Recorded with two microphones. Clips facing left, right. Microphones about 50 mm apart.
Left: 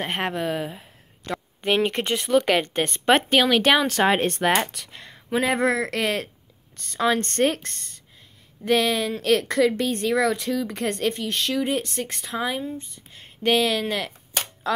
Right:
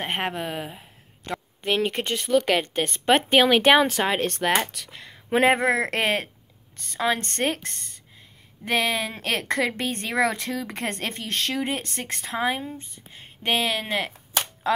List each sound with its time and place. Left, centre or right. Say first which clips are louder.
0.0 s a woman's voice: left 2 dB; centre
3.3 s speech: right 1 dB; right
4.0 s speech: left 4 dB; centre
4.7 s speech: even; centre
5.3 s speech: right 2 dB; right
6.8 s a woman's voice: left 2 dB; centre; by 13.2 s right
13.2 s cap gun: left 4 dB; right